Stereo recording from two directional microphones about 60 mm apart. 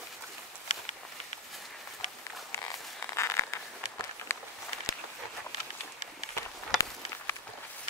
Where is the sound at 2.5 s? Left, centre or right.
Left.